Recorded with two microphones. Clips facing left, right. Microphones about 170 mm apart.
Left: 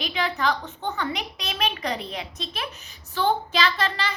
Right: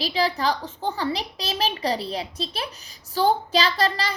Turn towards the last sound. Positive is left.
turn(degrees=-35)  # may be behind; listen again after turning